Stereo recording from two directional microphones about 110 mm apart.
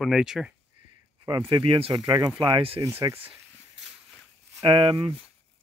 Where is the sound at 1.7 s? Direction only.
55° right (ahead or behind).